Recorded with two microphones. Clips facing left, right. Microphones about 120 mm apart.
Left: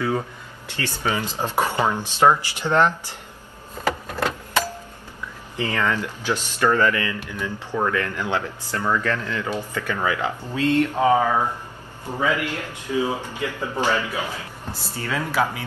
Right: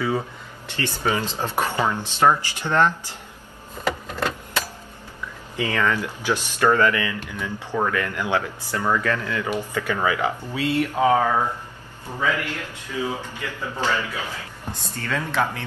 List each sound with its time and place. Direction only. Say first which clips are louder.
1.1 s speech: left 1 dB; 15° left (ahead or behind)
5.7 s speech: right 1 dB; 15° left (ahead or behind)
5.9 s speech: right 1 dB; 15° right (ahead or behind); by 11.4 s 5° left (ahead or behind)
12.2 s speech: left 2 dB; 15° left (ahead or behind)